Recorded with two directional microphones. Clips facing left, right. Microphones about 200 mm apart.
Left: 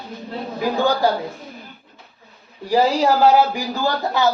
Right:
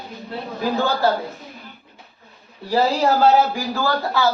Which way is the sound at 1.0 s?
15° left (ahead or behind).